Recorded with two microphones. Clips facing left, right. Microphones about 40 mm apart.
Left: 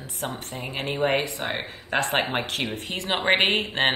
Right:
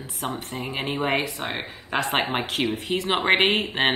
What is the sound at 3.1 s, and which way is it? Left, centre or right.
Speech, centre.